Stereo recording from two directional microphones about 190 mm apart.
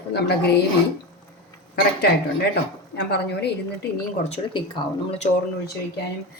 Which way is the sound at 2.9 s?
60° left (ahead or behind).